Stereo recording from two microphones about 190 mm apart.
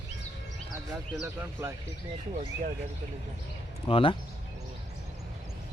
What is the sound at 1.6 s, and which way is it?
Speech, 10° right (ahead or behind).